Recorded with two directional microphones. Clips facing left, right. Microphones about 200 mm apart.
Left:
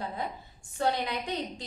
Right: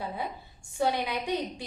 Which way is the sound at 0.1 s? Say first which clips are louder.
Even; 10° right (ahead or behind).